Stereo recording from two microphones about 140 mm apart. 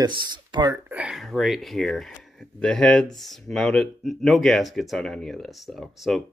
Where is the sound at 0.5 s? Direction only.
30° right (ahead or behind).